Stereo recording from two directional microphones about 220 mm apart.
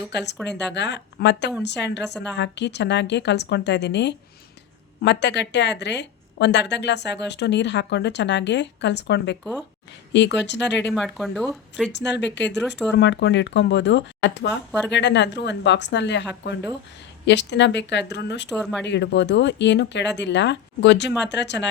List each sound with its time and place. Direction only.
0.1 s a woman's voice: 50° left (ahead or behind)
9.4 s speech: centre (ahead or behind)
10.1 s a woman's voice: 55° left (ahead or behind)
10.9 s speech: centre (ahead or behind)
11.9 s a woman's voice: 50° left (ahead or behind)
18.4 s speech: centre (ahead or behind)
18.9 s a woman's voice: 55° left (ahead or behind)